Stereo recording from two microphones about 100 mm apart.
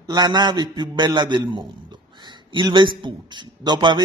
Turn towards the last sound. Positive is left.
turn(degrees=-45)  # may be behind; listen again after turning